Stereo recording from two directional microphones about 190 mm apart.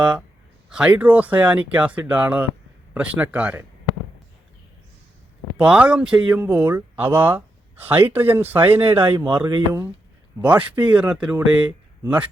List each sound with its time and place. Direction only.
0.7 s speech: 5° right (ahead or behind)
5.5 s speech: 5° right (ahead or behind)
9.1 s speech: 25° right (ahead or behind)
10.4 s speech: 5° right (ahead or behind)